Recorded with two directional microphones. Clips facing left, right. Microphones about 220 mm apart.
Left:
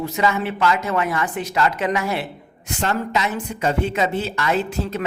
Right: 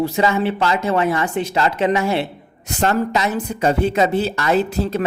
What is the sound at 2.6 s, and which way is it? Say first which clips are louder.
Speech: right 5 dB; 40° right (ahead or behind).